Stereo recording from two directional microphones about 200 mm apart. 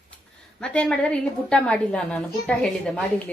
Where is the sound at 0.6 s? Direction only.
5° left (ahead or behind).